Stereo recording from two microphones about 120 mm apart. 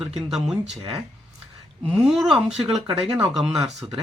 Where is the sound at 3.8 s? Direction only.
40° right (ahead or behind).